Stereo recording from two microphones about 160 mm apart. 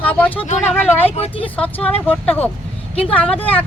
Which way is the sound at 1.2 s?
35° left (ahead or behind).